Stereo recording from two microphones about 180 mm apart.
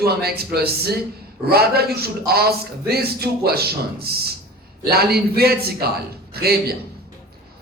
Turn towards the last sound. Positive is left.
turn(degrees=-60)  # may be behind; listen again after turning